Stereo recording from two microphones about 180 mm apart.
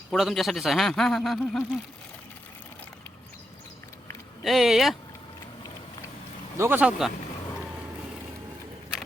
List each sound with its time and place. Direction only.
0.1 s speech: centre (ahead or behind)
4.4 s speech: centre (ahead or behind)
6.6 s speech: 10° right (ahead or behind)